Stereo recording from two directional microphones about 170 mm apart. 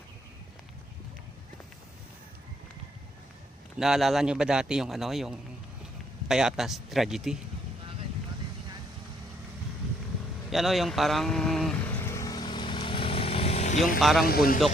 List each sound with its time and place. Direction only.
3.8 s a man's voice: 5° right (ahead or behind)
10.5 s vehicle: centre (ahead or behind); by 14.0 s 45° left (ahead or behind)
14.0 s a man's voice: centre (ahead or behind)
14.3 s speech: 60° left (ahead or behind)